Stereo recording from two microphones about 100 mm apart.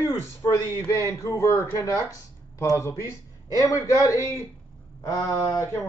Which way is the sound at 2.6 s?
30° left (ahead or behind).